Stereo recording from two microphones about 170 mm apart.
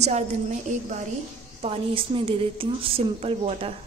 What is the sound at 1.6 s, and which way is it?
A woman's voice, 35° right (ahead or behind).